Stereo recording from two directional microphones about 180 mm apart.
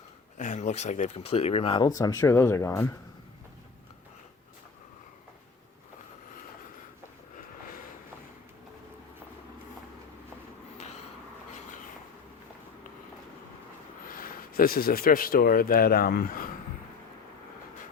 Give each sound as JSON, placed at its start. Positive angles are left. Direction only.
{"t": 0.3, "sound": "speech", "side_deg": 40}
{"t": 2.0, "sound": "speech", "side_deg": 20}
{"t": 14.1, "sound": "speech", "side_deg": 50}